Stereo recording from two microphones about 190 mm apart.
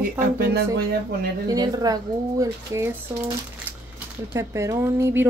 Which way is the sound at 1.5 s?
20° right (ahead or behind).